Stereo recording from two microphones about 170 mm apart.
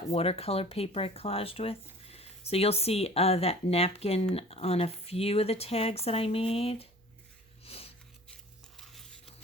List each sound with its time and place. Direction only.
0.1 s speech: 35° left (ahead or behind)
7.6 s sniff: 35° left (ahead or behind)
8.3 s a sound: centre (ahead or behind)